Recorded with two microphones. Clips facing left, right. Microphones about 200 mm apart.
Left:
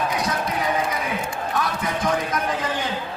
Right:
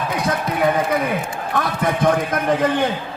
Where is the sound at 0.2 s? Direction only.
55° right (ahead or behind).